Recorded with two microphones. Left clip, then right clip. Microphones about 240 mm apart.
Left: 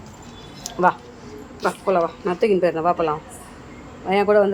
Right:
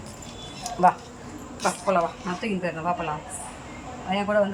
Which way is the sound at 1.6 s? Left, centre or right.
Centre.